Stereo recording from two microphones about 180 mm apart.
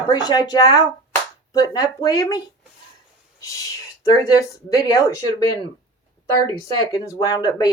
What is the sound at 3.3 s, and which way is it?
Owl, 20° left (ahead or behind).